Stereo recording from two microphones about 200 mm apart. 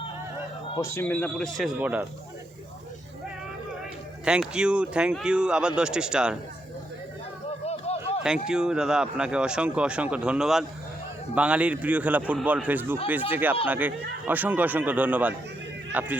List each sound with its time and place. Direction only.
0.8 s speech: 10° left (ahead or behind); by 2.0 s 5° right (ahead or behind)
4.3 s speech: 5° right (ahead or behind)
7.6 s a sound: 30° left (ahead or behind)
8.2 s speech: 5° right (ahead or behind)